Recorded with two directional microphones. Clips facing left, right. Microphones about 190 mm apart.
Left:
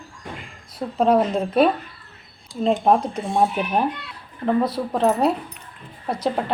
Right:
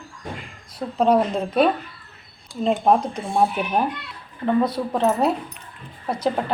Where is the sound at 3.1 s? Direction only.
15° left (ahead or behind).